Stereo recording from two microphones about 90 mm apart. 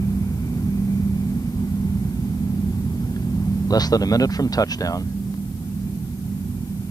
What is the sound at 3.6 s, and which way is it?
Speech, 45° left (ahead or behind).